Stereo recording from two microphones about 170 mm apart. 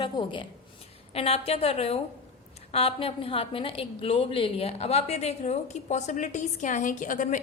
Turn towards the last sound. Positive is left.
turn(degrees=50)  # may be behind; listen again after turning